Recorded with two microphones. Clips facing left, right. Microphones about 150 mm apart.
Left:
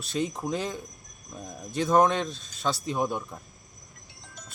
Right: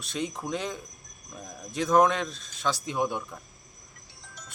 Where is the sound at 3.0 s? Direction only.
Centre (ahead or behind).